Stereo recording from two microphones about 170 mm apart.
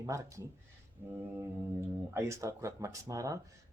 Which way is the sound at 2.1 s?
20° right (ahead or behind).